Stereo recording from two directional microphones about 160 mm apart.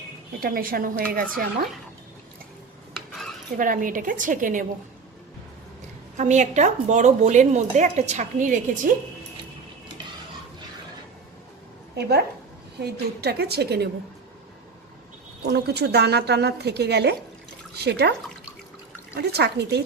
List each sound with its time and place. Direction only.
0.3 s a woman's voice: 65° right (ahead or behind)
3.6 s a woman's voice: 55° right (ahead or behind)
6.1 s speech: 50° right (ahead or behind)
11.9 s a woman's voice: 90° right
15.4 s a woman's voice: 90° right
19.1 s a woman's voice: 90° right